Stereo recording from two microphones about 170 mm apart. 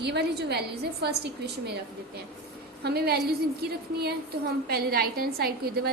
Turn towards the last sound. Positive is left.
turn(degrees=-65)  # may be behind; listen again after turning